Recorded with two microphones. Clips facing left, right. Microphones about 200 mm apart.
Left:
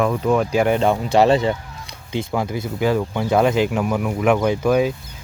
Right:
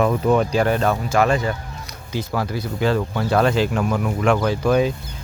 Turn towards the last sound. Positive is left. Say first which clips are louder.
# left 1 dB
turn(degrees=10)  # may be behind; listen again after turning